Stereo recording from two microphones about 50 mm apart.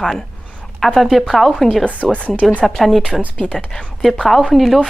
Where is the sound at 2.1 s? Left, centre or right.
Left.